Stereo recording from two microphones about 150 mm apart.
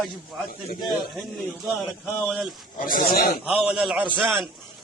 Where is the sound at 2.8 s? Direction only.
65° left (ahead or behind); by 3.3 s 85° left.